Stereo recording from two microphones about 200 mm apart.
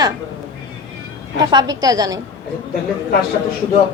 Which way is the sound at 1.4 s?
20° right (ahead or behind).